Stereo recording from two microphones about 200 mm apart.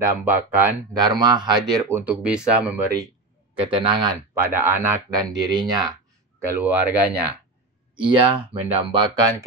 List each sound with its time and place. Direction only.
0.0 s speech: 10° right (ahead or behind)
3.5 s speech: 25° right (ahead or behind)
6.4 s speech: 10° right (ahead or behind)
7.9 s speech: 25° right (ahead or behind)